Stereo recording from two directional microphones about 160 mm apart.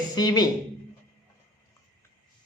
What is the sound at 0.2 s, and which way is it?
Speech, 25° left (ahead or behind).